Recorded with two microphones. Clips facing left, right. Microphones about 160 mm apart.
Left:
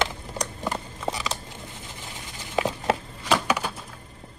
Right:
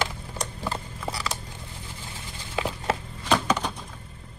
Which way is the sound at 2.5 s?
20° left (ahead or behind).